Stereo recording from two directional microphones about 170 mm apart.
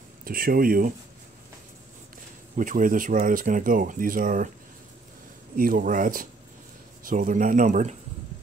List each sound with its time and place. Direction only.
0.2 s speech: 60° right (ahead or behind)
2.5 s speech: 50° right (ahead or behind)
5.6 s speech: 55° right (ahead or behind)